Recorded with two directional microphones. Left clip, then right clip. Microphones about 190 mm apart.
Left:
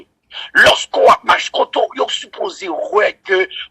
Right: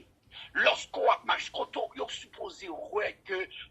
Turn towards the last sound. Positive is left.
turn(degrees=35)  # may be behind; listen again after turning